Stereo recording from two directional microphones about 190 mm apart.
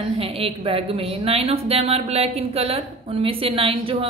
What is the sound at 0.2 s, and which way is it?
A woman's voice, 30° right (ahead or behind).